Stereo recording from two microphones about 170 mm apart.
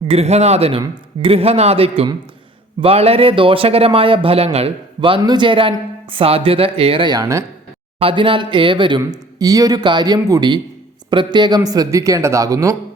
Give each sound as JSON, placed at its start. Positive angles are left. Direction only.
{"t": 0.1, "sound": "a man's voice", "side_deg": -40}
{"t": 7.9, "sound": "speech", "side_deg": -30}